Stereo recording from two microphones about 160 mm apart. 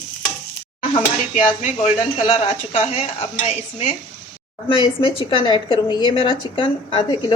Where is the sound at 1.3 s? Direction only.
50° left (ahead or behind).